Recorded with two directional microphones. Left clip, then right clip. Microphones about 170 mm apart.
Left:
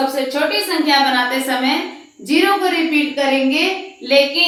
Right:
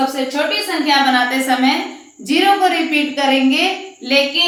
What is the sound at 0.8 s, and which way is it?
Speech, 25° right (ahead or behind).